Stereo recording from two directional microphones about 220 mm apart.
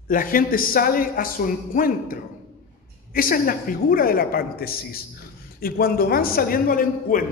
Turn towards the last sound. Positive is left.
turn(degrees=40)  # may be behind; listen again after turning